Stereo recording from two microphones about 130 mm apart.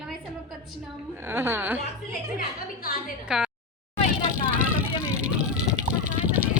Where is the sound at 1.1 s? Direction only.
20° right (ahead or behind).